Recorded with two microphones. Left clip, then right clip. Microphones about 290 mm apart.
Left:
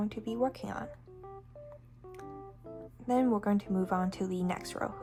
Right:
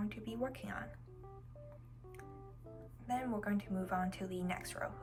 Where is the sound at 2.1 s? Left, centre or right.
Centre.